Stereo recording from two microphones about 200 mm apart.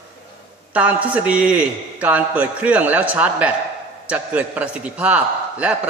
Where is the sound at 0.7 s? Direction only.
5° right (ahead or behind).